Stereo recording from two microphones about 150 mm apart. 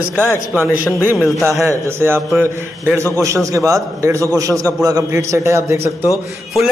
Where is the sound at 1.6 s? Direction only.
15° right (ahead or behind).